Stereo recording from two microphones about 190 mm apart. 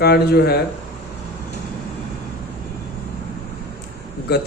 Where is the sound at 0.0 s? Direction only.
55° left (ahead or behind).